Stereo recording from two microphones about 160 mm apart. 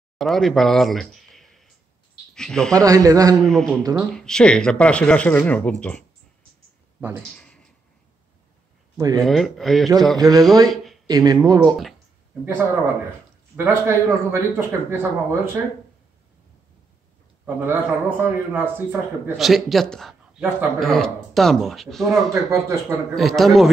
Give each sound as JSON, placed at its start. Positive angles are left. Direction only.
{"t": 0.2, "sound": "a sound", "side_deg": 0}
{"t": 2.3, "sound": "speech", "side_deg": 5}
{"t": 2.7, "sound": "a man's voice", "side_deg": -20}
{"t": 3.4, "sound": "speech", "side_deg": 0}
{"t": 7.0, "sound": "speech", "side_deg": -15}
{"t": 7.3, "sound": "a sound", "side_deg": 5}
{"t": 8.9, "sound": "speech", "side_deg": -25}
{"t": 9.2, "sound": "speech", "side_deg": 0}
{"t": 10.1, "sound": "a man's voice", "side_deg": -25}
{"t": 13.6, "sound": "a man's voice", "side_deg": -15}
{"t": 17.6, "sound": "a man's voice", "side_deg": -10}
{"t": 19.3, "sound": "speech", "side_deg": 0}
{"t": 22.3, "sound": "a man's voice", "side_deg": -20}
{"t": 23.1, "sound": "speech", "side_deg": 0}